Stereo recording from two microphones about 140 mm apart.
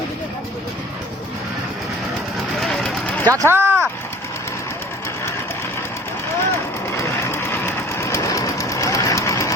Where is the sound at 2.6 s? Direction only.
5° left (ahead or behind).